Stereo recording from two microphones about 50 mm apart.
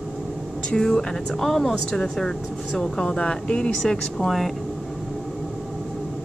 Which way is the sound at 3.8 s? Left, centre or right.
Centre.